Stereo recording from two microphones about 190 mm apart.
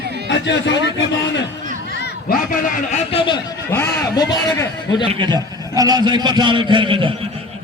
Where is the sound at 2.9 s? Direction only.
30° left (ahead or behind).